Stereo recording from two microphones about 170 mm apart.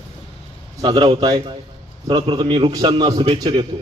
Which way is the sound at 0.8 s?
25° right (ahead or behind).